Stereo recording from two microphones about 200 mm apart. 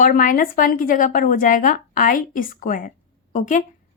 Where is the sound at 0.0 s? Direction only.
45° left (ahead or behind).